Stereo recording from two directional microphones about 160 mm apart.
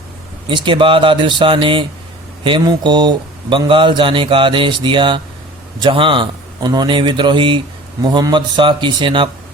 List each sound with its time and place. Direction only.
0.4 s speech: 30° right (ahead or behind)